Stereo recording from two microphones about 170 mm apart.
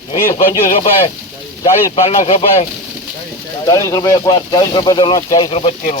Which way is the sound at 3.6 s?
20° left (ahead or behind).